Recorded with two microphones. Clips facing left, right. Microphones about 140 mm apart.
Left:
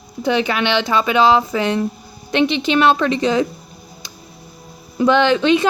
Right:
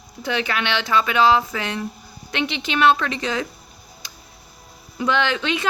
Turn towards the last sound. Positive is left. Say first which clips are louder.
# left 8 dB
turn(degrees=25)  # may be behind; listen again after turning